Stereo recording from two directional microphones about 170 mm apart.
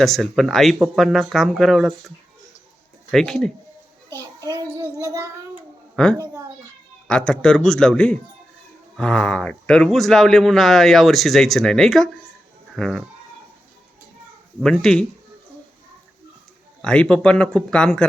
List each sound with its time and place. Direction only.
0.0 s speech: centre (ahead or behind)
4.2 s child singing: 20° right (ahead or behind)
6.0 s speech: 5° left (ahead or behind)
14.6 s speech: 5° left (ahead or behind)
16.8 s speech: 5° left (ahead or behind)